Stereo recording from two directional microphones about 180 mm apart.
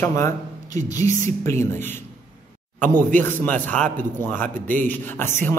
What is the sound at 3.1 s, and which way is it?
A man's voice, 10° left (ahead or behind).